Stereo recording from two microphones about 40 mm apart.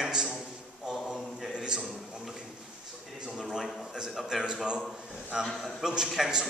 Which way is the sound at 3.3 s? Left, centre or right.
Centre.